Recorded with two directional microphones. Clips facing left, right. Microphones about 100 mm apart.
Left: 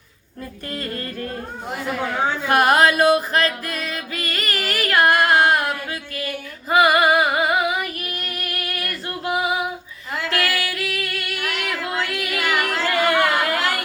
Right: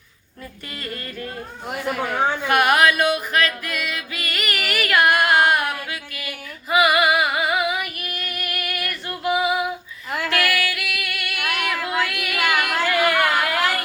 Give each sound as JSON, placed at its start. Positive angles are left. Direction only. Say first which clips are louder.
{"t": 0.7, "sound": "music", "louder": "left 4 dB", "side_deg": 40}
{"t": 1.6, "sound": "speech", "louder": "right 1 dB", "side_deg": -15}
{"t": 2.5, "sound": "music", "louder": "left 2 dB", "side_deg": 35}
{"t": 11.3, "sound": "female singing", "louder": "right 3 dB", "side_deg": -15}
{"t": 11.9, "sound": "child singing", "louder": "right 1 dB", "side_deg": 25}
{"t": 12.4, "sound": "singing", "louder": "right 2 dB", "side_deg": -15}
{"t": 13.1, "sound": "chatter", "louder": "left 1 dB", "side_deg": 25}